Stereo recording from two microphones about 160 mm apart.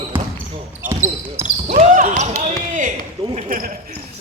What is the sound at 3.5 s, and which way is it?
Speech, 60° right (ahead or behind).